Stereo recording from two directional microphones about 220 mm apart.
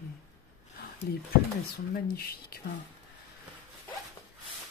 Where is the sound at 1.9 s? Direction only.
45° left (ahead or behind).